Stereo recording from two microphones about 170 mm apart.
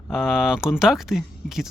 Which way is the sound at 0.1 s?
Centre (ahead or behind).